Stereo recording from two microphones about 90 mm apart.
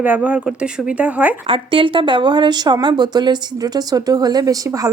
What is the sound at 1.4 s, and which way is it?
Speech, 80° right.